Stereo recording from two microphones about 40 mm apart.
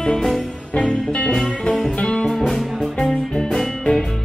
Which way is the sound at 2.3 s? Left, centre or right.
Centre.